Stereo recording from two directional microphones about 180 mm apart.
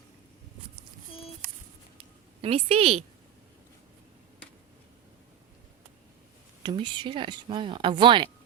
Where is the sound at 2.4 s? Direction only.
35° right (ahead or behind).